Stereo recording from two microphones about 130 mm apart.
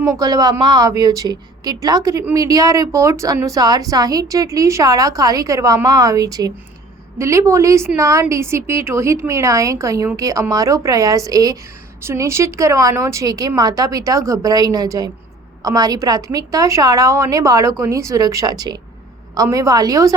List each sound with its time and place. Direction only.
0.0 s speech: 25° right (ahead or behind)